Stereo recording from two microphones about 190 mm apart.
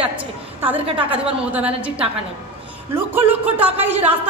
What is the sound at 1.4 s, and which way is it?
Speech, 5° right (ahead or behind).